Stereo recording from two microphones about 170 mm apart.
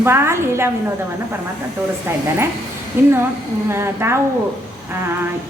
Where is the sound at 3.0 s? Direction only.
15° right (ahead or behind).